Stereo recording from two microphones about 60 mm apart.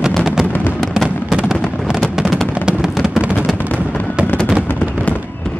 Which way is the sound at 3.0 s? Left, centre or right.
Centre.